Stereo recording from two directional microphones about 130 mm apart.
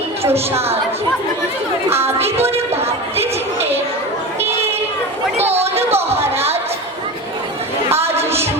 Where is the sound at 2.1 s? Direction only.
50° right (ahead or behind).